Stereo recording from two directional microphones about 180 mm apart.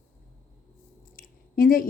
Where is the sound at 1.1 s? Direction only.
55° left (ahead or behind).